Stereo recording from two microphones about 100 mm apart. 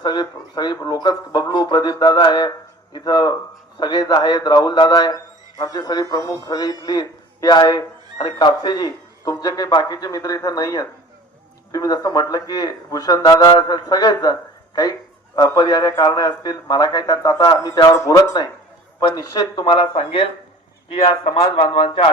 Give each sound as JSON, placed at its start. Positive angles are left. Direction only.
{"t": 0.0, "sound": "a man's voice", "side_deg": 45}
{"t": 15.4, "sound": "a man's voice", "side_deg": 40}